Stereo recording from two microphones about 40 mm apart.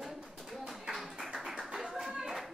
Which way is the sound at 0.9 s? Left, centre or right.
Centre.